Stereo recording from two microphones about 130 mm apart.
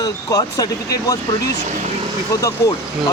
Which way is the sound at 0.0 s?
30° left (ahead or behind).